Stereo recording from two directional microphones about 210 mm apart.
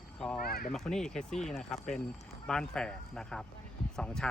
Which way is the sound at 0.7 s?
5° left (ahead or behind).